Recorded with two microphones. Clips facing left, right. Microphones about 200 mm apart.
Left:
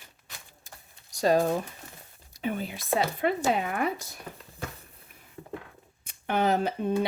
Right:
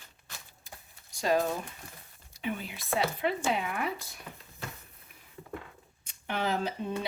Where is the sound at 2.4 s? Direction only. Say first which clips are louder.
Left 4 dB; 40° left (ahead or behind).